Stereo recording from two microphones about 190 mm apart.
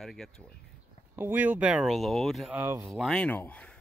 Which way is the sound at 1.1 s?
10° right (ahead or behind).